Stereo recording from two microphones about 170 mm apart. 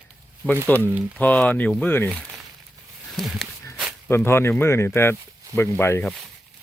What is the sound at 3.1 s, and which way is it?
Speech, centre (ahead or behind).